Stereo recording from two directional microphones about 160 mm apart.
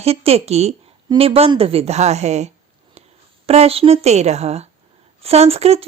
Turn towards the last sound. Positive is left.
turn(degrees=-40)  # may be behind; listen again after turning